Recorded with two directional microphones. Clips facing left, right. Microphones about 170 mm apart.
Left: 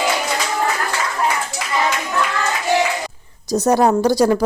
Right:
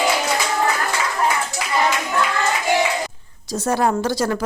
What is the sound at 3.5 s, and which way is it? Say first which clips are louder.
Speech: left 5 dB; 40° left (ahead or behind).